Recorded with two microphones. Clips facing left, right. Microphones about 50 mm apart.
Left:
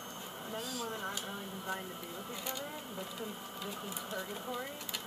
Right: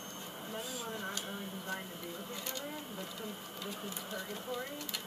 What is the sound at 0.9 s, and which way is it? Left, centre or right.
Speech, centre.